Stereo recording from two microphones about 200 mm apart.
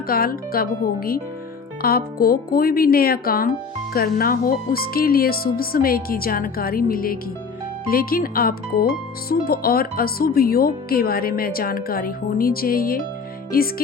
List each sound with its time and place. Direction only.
0.1 s speech: 45° left (ahead or behind)